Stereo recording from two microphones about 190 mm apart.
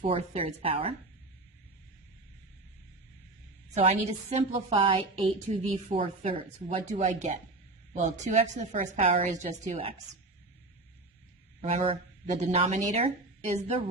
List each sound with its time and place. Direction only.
0.0 s a woman's voice: 30° right (ahead or behind)
3.8 s a woman's voice: 35° right (ahead or behind)
11.6 s speech: 35° right (ahead or behind)